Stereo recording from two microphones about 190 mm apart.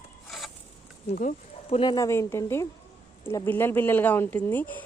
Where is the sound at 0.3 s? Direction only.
Centre (ahead or behind).